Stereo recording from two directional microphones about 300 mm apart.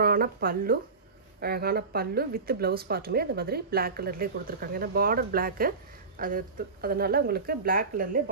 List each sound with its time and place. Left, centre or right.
0.0 s speech: right